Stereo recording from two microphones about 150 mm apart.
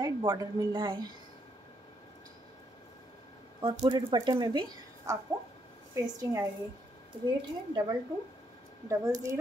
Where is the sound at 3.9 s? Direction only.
30° right (ahead or behind).